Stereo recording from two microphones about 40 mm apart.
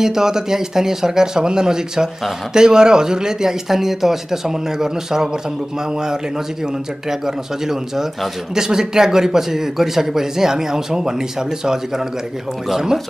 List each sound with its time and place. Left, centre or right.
0.0 s speech: centre